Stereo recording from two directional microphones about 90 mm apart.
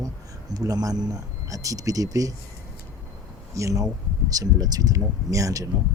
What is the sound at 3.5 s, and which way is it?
A man's voice, 35° right (ahead or behind).